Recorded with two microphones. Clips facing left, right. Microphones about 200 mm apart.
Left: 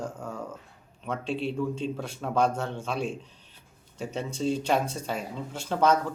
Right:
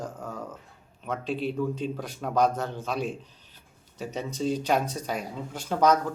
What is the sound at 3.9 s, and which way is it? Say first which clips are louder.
Speech: even; 5° right (ahead or behind).